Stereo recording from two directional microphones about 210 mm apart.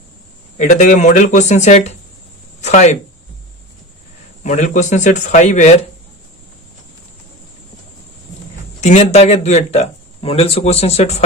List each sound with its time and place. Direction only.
0.5 s speech: 35° left (ahead or behind)
4.4 s speech: 35° left (ahead or behind)
8.8 s speech: 35° left (ahead or behind)